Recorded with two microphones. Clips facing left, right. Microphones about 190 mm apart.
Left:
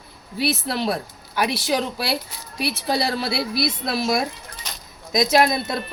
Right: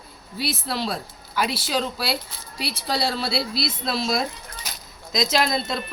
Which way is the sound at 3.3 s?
25° right (ahead or behind).